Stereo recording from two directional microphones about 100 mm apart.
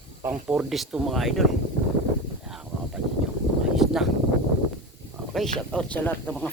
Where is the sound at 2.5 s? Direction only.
5° right (ahead or behind).